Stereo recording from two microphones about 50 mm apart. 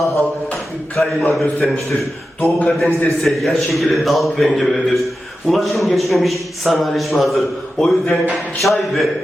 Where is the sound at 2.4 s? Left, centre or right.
Left.